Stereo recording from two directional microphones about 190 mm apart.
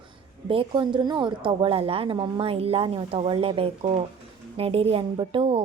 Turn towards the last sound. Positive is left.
turn(degrees=-30)  # may be behind; listen again after turning